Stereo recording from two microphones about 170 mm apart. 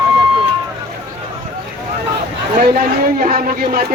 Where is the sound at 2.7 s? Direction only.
55° right (ahead or behind).